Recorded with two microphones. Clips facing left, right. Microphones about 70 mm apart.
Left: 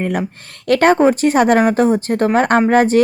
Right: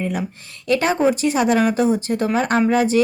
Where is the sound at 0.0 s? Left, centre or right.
Left.